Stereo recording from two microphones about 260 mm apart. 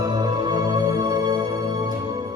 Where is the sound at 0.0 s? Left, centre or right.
Centre.